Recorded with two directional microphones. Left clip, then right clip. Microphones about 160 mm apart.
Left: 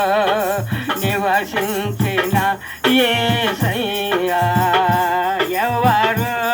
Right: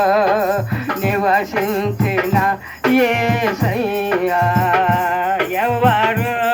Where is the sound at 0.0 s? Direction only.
10° right (ahead or behind).